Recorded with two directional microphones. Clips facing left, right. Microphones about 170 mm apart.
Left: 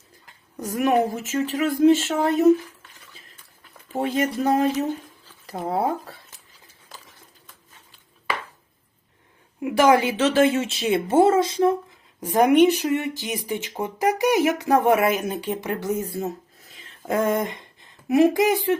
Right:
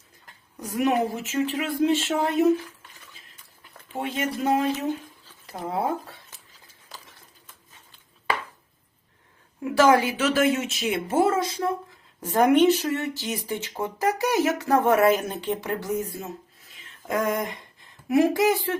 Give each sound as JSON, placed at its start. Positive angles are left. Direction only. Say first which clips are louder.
{"t": 0.5, "sound": "speech", "louder": "left 3 dB", "side_deg": 45}
{"t": 3.9, "sound": "speech", "louder": "left 5 dB", "side_deg": 40}
{"t": 9.6, "sound": "speech", "louder": "left 1 dB", "side_deg": 15}
{"t": 17.1, "sound": "a sound", "louder": "left 3 dB", "side_deg": 25}
{"t": 18.1, "sound": "speech", "louder": "left 2 dB", "side_deg": 20}